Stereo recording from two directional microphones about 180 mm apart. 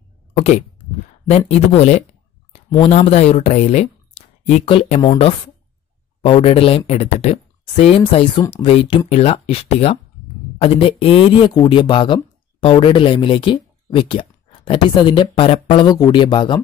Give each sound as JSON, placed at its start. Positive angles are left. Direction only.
{"t": 1.3, "sound": "speech", "side_deg": 35}
{"t": 6.2, "sound": "speech", "side_deg": 30}